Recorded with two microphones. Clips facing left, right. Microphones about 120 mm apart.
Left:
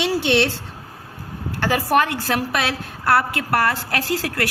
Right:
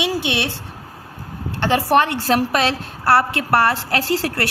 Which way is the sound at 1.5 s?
25° right (ahead or behind).